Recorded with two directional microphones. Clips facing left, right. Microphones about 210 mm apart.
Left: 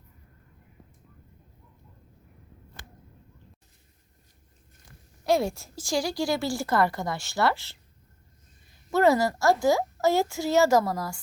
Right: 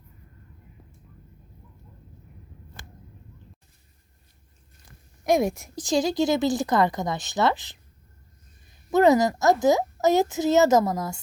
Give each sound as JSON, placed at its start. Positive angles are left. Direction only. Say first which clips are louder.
{"t": 5.2, "sound": "speech", "louder": "right 3 dB", "side_deg": -15}
{"t": 8.9, "sound": "speech", "louder": "right 3 dB", "side_deg": -20}